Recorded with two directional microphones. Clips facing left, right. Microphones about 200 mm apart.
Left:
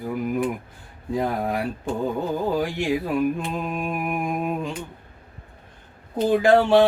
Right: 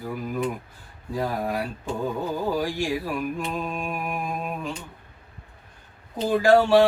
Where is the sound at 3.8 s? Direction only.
15° left (ahead or behind).